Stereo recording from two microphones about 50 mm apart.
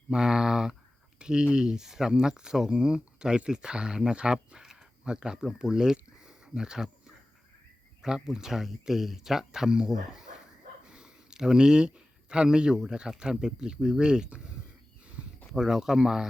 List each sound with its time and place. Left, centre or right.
0.1 s speech: centre
8.0 s speech: centre
15.5 s speech: centre